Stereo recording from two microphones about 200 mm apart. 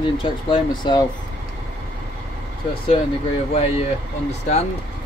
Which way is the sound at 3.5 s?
30° left (ahead or behind).